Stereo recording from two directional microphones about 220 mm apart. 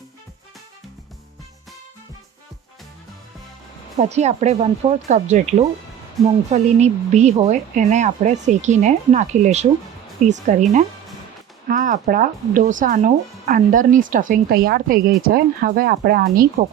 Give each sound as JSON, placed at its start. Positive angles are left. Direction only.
{"t": 3.9, "sound": "speech", "side_deg": -30}
{"t": 6.2, "sound": "speech", "side_deg": 0}
{"t": 6.5, "sound": "speech", "side_deg": -30}